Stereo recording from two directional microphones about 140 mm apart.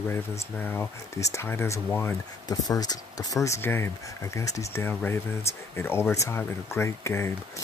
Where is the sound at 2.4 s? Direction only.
30° left (ahead or behind).